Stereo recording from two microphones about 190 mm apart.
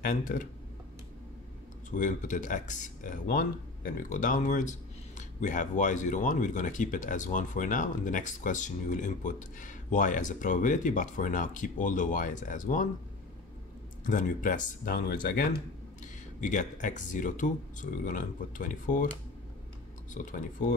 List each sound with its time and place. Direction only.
0.0 s speech: 45° left (ahead or behind)
1.9 s speech: 40° left (ahead or behind)
14.0 s speech: 45° left (ahead or behind)
20.2 s speech: 45° left (ahead or behind)